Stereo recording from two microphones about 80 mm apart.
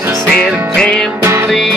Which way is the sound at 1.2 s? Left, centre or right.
Right.